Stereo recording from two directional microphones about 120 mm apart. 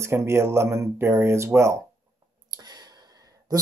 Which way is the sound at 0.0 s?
20° right (ahead or behind).